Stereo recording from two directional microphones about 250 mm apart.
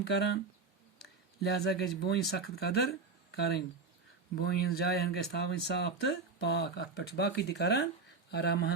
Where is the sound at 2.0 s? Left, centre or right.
Left.